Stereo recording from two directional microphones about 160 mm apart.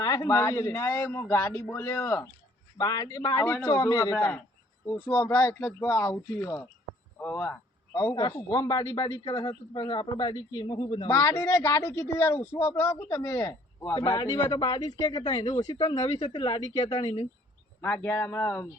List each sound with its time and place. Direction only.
0.0 s a man's voice: 25° left (ahead or behind)
7.9 s a man's voice: 25° left (ahead or behind)
16.0 s speech: 40° left (ahead or behind)
16.3 s speech: 30° left (ahead or behind)
17.7 s a man's voice: 10° left (ahead or behind)